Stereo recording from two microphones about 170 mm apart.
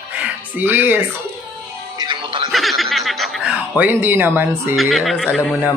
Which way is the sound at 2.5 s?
Centre (ahead or behind).